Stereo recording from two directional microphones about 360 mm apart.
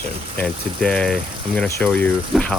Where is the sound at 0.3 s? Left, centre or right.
Centre.